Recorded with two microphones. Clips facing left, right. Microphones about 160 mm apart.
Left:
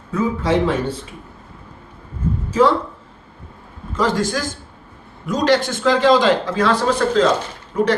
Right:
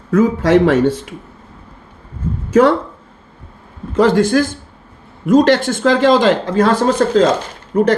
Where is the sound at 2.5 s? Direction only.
70° right (ahead or behind).